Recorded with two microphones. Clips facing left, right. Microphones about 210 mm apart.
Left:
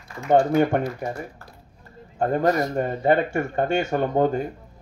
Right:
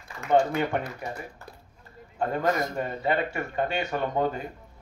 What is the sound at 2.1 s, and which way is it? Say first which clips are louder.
A man's voice: left 5 dB; 45° left (ahead or behind).